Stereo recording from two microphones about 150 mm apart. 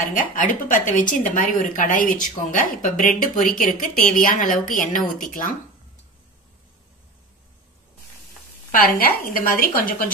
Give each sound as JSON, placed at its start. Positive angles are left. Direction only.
{"t": 0.0, "sound": "a woman's voice", "side_deg": 65}
{"t": 8.7, "sound": "speech", "side_deg": 75}